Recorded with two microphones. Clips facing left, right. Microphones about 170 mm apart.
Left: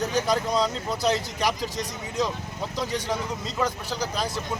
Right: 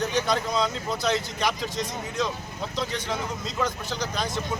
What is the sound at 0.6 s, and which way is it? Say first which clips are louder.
Speech: left 1 dB; 10° left (ahead or behind).